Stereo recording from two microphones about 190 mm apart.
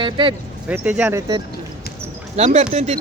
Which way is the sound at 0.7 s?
5° right (ahead or behind).